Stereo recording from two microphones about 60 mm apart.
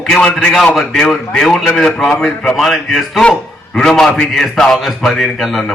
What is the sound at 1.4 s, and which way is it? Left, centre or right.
A man's voice, centre.